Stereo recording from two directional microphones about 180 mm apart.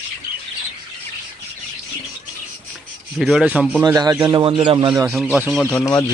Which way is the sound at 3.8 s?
20° right (ahead or behind).